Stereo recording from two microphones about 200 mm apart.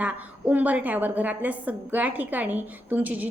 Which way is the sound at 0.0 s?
10° right (ahead or behind).